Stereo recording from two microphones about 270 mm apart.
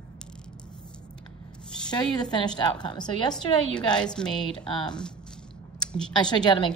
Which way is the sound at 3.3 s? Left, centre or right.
Centre.